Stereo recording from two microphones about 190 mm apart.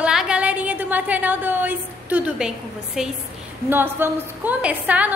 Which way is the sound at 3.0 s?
Centre (ahead or behind).